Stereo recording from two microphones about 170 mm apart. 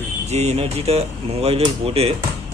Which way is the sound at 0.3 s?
40° right (ahead or behind).